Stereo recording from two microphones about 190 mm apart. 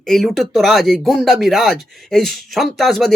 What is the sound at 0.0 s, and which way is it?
Speech, centre (ahead or behind).